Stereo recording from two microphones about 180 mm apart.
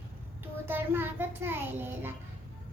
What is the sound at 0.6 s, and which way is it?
A child's voice, 10° right (ahead or behind).